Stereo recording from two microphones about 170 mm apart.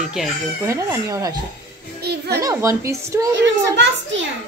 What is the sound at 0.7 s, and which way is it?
Speech, 15° right (ahead or behind).